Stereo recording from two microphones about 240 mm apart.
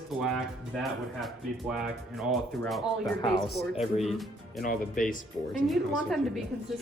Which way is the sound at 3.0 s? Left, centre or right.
Centre.